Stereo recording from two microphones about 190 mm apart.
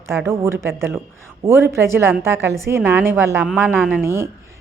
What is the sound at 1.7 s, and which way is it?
A woman's voice, 15° right (ahead or behind).